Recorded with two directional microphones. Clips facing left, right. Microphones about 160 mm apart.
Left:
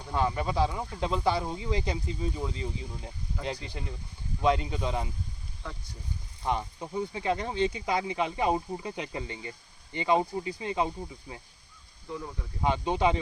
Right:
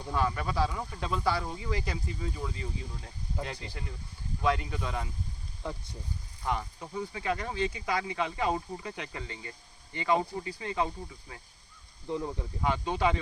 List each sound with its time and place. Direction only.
0.1 s speech: 20° left (ahead or behind)
6.4 s speech: 20° left (ahead or behind)
12.0 s speech: 25° right (ahead or behind)
12.6 s speech: 20° left (ahead or behind)